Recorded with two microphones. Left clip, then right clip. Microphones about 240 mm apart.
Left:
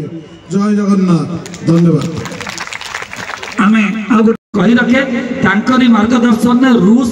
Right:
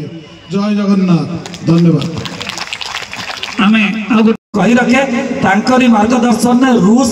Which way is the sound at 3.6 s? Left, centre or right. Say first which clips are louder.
Even; centre.